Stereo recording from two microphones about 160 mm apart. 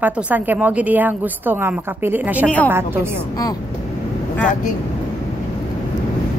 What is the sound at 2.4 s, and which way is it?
Speech, 10° left (ahead or behind).